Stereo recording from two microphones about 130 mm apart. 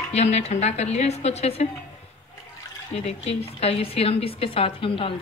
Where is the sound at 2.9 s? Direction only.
55° left (ahead or behind).